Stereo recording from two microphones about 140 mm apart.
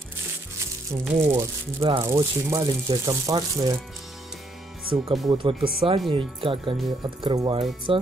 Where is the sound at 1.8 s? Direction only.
40° right (ahead or behind).